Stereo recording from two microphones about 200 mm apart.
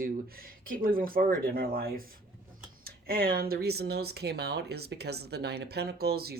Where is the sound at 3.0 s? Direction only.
50° right (ahead or behind).